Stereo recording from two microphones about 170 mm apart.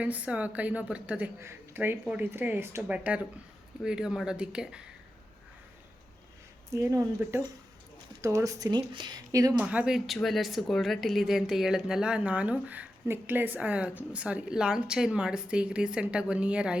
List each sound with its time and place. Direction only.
0.0 s a woman's voice: 10° right (ahead or behind)
6.7 s a woman's voice: 15° right (ahead or behind)
9.6 s speech: 5° right (ahead or behind)